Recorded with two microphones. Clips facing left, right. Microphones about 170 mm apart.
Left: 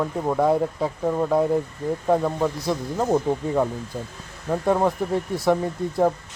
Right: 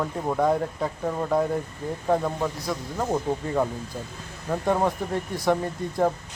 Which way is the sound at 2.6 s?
25° left (ahead or behind).